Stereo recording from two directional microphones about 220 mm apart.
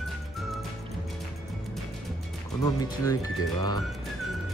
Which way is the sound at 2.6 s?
15° left (ahead or behind).